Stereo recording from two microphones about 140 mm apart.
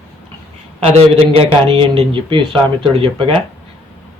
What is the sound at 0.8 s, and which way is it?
Speech, 45° right (ahead or behind).